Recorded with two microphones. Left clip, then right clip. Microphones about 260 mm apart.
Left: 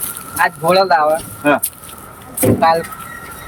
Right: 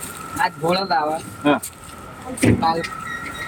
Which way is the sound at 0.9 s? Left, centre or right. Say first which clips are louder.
Left 7 dB; centre.